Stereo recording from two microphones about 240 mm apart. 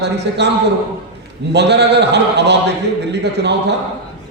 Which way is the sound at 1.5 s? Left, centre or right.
Right.